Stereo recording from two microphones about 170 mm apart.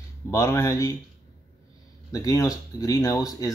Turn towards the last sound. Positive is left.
turn(degrees=20)  # may be behind; listen again after turning